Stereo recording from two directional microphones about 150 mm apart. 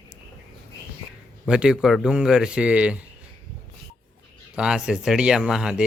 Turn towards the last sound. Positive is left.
turn(degrees=-5)  # may be behind; listen again after turning